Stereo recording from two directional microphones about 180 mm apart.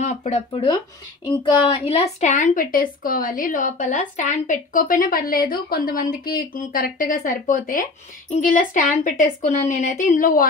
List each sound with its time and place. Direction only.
0.0 s speech: 40° left (ahead or behind)
1.2 s speech: 25° left (ahead or behind)
1.7 s a woman's voice: 35° left (ahead or behind)